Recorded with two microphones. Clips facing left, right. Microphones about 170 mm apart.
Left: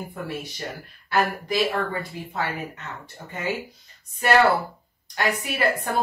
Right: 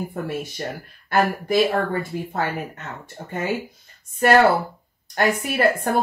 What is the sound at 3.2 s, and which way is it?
Speech, 50° right (ahead or behind).